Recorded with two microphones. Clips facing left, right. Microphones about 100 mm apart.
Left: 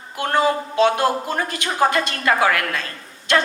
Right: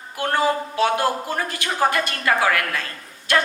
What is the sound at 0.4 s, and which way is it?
A woman's voice, 20° left (ahead or behind).